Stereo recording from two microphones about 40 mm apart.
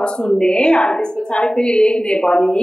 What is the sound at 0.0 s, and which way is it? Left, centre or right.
A woman's voice, left.